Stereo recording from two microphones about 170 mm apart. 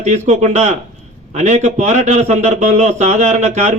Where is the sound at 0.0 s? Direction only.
45° right (ahead or behind).